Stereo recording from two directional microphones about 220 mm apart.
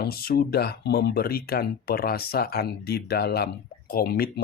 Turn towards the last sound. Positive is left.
turn(degrees=45)  # may be behind; listen again after turning